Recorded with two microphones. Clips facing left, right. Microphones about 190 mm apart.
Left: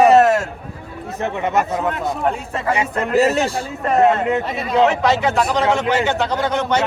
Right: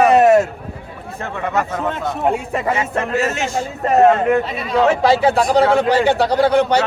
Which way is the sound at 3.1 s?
35° left (ahead or behind).